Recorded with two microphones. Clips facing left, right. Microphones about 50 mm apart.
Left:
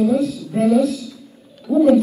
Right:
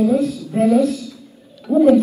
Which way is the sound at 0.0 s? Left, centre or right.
Right.